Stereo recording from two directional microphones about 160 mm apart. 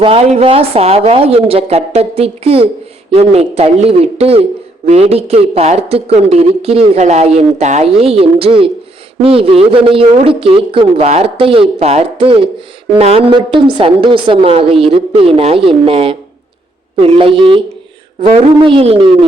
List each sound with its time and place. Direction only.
0.0 s speech: 40° right (ahead or behind)